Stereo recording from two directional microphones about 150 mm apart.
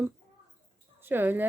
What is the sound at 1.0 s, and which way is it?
Speech, 15° right (ahead or behind).